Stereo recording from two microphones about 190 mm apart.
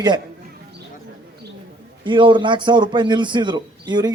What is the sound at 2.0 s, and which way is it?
A man's voice, 25° right (ahead or behind).